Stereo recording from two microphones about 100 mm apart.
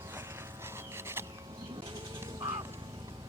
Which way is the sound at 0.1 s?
25° right (ahead or behind).